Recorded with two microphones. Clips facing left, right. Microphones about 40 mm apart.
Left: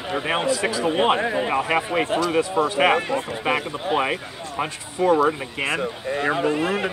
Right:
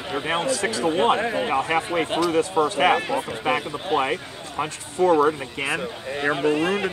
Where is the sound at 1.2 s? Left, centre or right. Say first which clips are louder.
Left 1 dB; centre.